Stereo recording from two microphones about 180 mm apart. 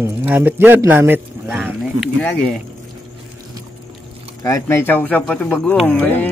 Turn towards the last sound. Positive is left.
turn(degrees=10)  # may be behind; listen again after turning